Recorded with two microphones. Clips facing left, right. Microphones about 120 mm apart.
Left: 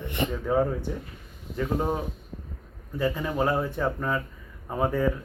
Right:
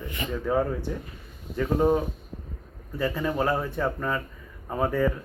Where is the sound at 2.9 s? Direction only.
15° left (ahead or behind).